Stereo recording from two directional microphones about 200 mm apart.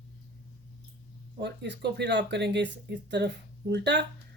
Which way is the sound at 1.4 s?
60° right (ahead or behind).